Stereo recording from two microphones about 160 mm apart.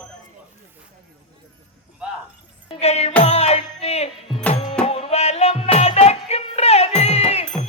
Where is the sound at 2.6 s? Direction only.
40° left (ahead or behind).